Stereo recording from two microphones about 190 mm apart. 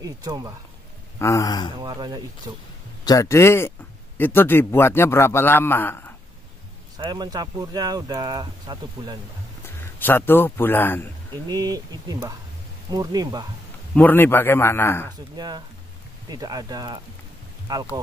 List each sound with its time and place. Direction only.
0.0 s speech: 20° right (ahead or behind)
1.2 s speech: 15° left (ahead or behind)
1.8 s speech: 20° right (ahead or behind)
3.1 s a man's voice: 15° left (ahead or behind)
7.0 s speech: 20° right (ahead or behind)
9.6 s speech: 10° left (ahead or behind)
11.4 s speech: 20° right (ahead or behind)
13.9 s a man's voice: 10° left (ahead or behind)
15.3 s speech: 20° right (ahead or behind)